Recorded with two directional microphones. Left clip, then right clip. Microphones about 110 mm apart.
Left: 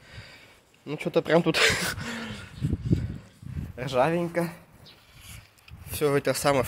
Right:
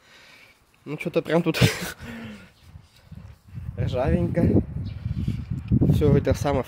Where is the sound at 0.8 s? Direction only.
65° right (ahead or behind).